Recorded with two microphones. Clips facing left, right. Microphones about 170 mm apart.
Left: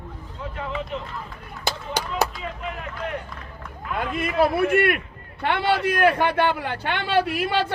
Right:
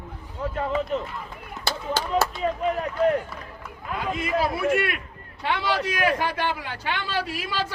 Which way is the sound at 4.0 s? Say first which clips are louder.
Left 3 dB; 55° left (ahead or behind).